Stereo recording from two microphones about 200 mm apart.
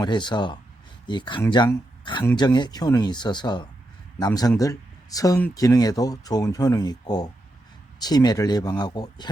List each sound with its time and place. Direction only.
0.0 s speech: 20° left (ahead or behind)